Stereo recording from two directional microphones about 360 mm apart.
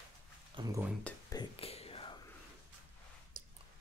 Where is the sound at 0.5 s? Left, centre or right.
Centre.